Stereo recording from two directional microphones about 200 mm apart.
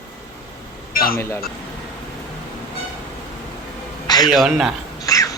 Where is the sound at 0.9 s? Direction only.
50° left (ahead or behind).